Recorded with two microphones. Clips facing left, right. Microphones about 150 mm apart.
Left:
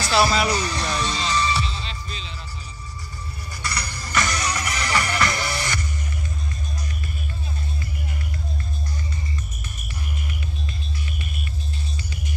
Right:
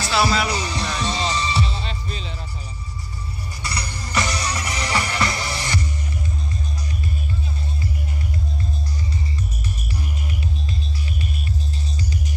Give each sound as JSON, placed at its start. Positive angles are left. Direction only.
{"t": 0.1, "sound": "speech", "side_deg": 0}
{"t": 0.6, "sound": "music", "side_deg": -30}
{"t": 1.8, "sound": "music", "side_deg": -45}
{"t": 3.6, "sound": "music", "side_deg": -30}